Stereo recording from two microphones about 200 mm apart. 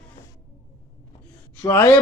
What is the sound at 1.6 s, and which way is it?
Speech, 15° left (ahead or behind).